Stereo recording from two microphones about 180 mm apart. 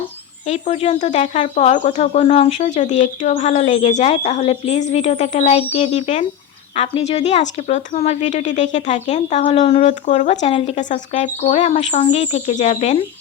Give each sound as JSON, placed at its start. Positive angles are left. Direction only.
{"t": 0.4, "sound": "speech", "side_deg": 40}